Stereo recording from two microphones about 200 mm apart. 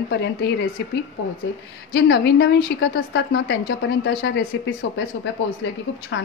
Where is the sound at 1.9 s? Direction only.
55° left (ahead or behind).